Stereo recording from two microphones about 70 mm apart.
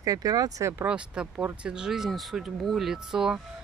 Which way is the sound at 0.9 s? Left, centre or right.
Centre.